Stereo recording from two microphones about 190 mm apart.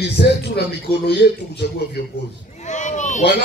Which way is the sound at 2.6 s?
40° left (ahead or behind).